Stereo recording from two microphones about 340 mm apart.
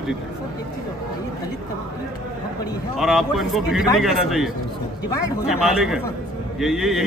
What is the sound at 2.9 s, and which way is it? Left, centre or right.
A man's voice, centre.